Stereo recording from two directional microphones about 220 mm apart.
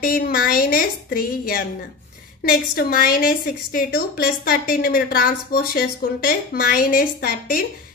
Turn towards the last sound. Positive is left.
turn(degrees=40)  # may be behind; listen again after turning